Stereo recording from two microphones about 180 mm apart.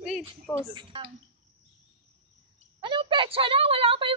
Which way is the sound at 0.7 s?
25° right (ahead or behind).